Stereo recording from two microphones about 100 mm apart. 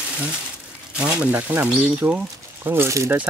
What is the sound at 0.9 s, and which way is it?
Speech, 15° right (ahead or behind).